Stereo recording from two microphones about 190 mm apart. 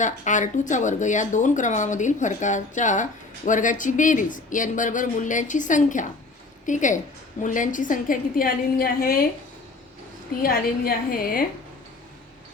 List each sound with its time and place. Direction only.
0.0 s a woman's voice: 40° left (ahead or behind)
10.4 s a woman's voice: 50° left (ahead or behind)